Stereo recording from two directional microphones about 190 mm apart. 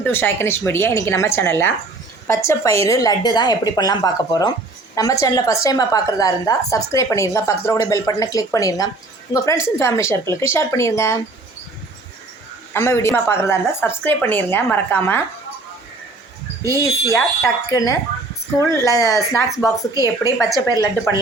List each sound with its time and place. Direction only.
0.0 s a woman's voice: 10° left (ahead or behind)
12.7 s a woman's voice: 15° left (ahead or behind)
17.1 s a woman's voice: 15° left (ahead or behind)